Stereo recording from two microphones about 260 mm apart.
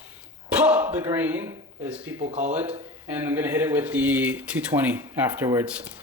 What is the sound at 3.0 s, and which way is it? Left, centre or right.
Speech, centre.